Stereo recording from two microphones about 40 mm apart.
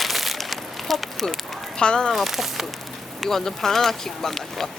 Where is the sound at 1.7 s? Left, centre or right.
Left.